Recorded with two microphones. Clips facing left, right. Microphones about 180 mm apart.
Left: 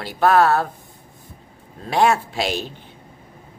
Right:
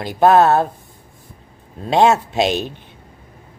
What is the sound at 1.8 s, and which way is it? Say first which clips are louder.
Speech: right 4 dB; 25° right (ahead or behind).